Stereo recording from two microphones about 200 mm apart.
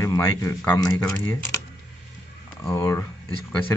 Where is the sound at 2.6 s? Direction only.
15° left (ahead or behind).